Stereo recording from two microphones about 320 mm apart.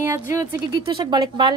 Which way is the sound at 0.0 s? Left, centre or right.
Centre.